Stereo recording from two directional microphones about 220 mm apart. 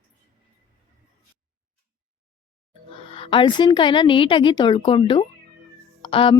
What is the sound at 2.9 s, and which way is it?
Speech, 25° left (ahead or behind).